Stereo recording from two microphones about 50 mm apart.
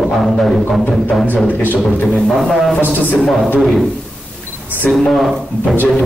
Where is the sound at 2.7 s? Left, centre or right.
Left.